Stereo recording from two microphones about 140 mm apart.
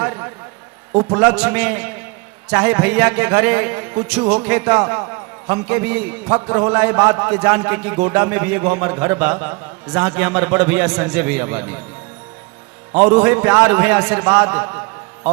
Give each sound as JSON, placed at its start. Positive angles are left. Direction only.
{"t": 0.0, "sound": "a sound", "side_deg": -20}
{"t": 0.9, "sound": "a man's voice", "side_deg": -15}
{"t": 12.9, "sound": "a man's voice", "side_deg": -10}